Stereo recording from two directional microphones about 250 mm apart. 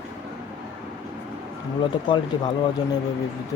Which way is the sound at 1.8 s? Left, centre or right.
Centre.